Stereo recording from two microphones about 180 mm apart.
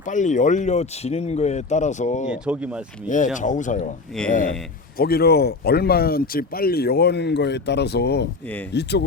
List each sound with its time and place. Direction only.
0.0 s speech: 45° left (ahead or behind)
2.3 s speech: 5° right (ahead or behind)
3.3 s a man's voice: 45° left (ahead or behind)
4.9 s speech: 60° left (ahead or behind)